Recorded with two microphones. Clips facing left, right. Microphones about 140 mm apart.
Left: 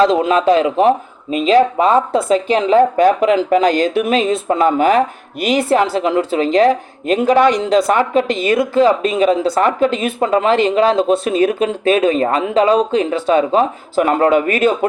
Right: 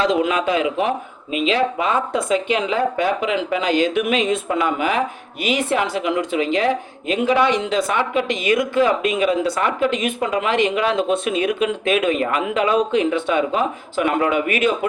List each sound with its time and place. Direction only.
0.0 s speech: 35° left (ahead or behind)